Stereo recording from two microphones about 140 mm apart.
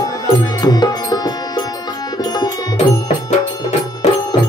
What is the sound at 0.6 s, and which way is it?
Music, 30° left (ahead or behind).